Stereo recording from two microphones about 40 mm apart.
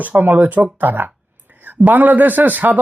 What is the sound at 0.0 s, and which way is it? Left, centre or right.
Speech, right.